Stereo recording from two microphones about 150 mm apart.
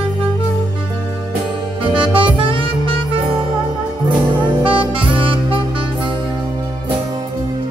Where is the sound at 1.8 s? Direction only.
35° right (ahead or behind).